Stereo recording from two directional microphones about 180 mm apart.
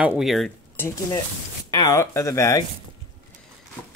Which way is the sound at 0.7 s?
15° left (ahead or behind).